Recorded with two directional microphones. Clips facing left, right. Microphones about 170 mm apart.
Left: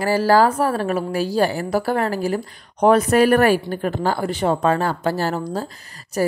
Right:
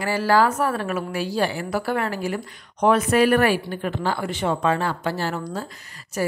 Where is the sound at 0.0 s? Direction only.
35° left (ahead or behind).